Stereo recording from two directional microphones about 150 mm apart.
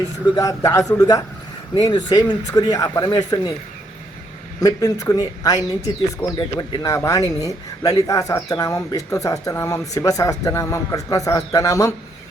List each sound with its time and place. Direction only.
0.3 s speech: 25° left (ahead or behind)
4.6 s speech: 25° left (ahead or behind)
6.2 s speech: 10° left (ahead or behind)
6.6 s speech: 25° left (ahead or behind)